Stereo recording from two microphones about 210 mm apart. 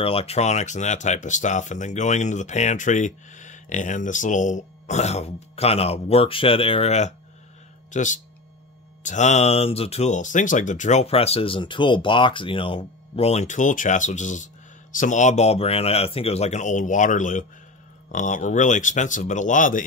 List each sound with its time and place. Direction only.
0.0 s speech: 25° left (ahead or behind)